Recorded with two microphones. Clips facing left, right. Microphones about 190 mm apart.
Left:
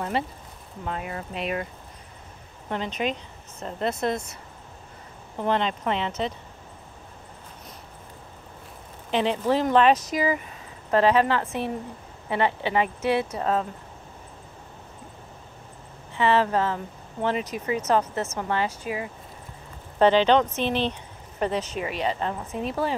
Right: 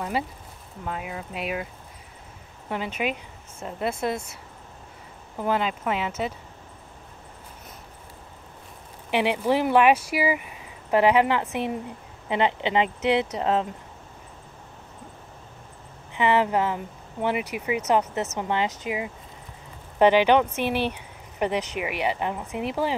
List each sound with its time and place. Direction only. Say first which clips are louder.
0.8 s speech: left 1 dB; 5° right (ahead or behind)
2.7 s speech: even; 10° right (ahead or behind)
5.4 s speech: even; 5° right (ahead or behind)
9.1 s speech: even; 10° right (ahead or behind)
16.1 s speech: even; 15° right (ahead or behind)